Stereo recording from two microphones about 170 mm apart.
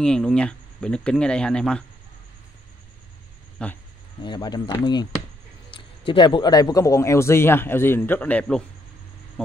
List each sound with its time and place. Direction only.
0.0 s speech: 5° left (ahead or behind)
3.6 s speech: 5° left (ahead or behind)
4.2 s a man's voice: 25° left (ahead or behind); by 8.6 s 5° left (ahead or behind)